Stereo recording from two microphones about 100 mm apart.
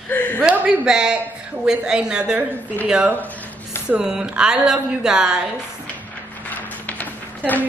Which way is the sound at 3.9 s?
10° right (ahead or behind).